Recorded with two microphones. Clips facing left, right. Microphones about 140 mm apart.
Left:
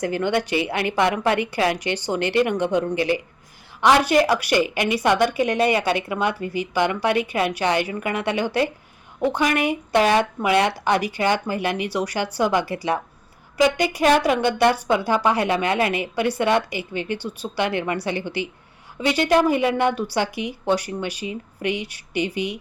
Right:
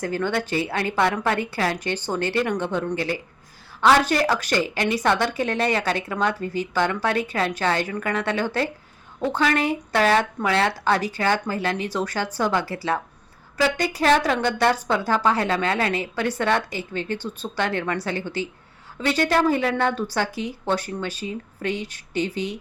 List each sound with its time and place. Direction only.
0.0 s speech: 15° left (ahead or behind)